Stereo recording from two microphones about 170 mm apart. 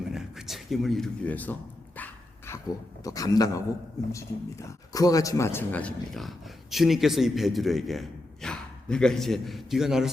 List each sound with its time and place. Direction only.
0.1 s speech: centre (ahead or behind)
3.0 s a man's voice: 20° left (ahead or behind); by 10.1 s 5° right (ahead or behind)